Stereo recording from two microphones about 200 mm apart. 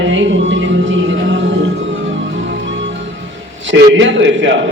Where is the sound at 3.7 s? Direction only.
70° right (ahead or behind).